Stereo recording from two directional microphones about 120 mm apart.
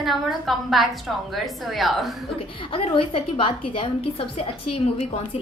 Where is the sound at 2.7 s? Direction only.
45° left (ahead or behind).